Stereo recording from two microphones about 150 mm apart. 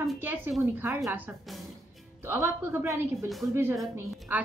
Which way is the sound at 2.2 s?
15° right (ahead or behind).